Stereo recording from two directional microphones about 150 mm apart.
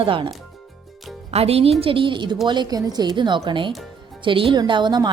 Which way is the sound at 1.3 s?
40° right (ahead or behind).